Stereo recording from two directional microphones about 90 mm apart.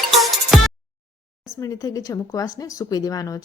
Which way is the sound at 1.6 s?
40° left (ahead or behind).